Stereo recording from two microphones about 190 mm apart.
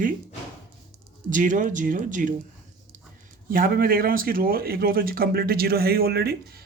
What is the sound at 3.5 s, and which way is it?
Speech, 50° right (ahead or behind).